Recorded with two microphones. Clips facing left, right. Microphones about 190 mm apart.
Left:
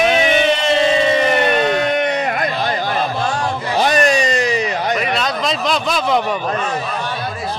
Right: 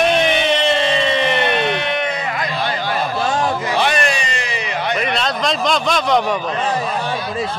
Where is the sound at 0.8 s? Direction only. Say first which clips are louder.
Left 3 dB; 45° left (ahead or behind).